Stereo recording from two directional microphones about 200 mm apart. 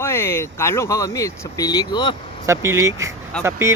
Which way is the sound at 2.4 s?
15° right (ahead or behind).